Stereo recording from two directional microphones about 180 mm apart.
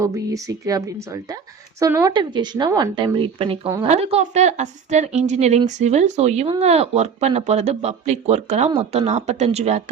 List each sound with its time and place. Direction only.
0.0 s a woman's voice: 15° right (ahead or behind); by 9.8 s 35° right (ahead or behind)